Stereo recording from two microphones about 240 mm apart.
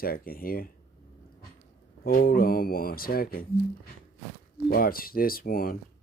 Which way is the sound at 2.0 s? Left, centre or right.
Left.